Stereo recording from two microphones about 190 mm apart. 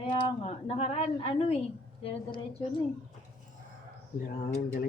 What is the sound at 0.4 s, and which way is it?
A woman's voice, 35° left (ahead or behind).